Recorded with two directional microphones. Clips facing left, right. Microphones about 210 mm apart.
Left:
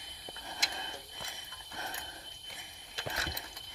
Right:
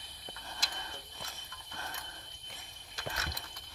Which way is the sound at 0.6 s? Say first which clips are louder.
Left 3 dB; 25° left (ahead or behind).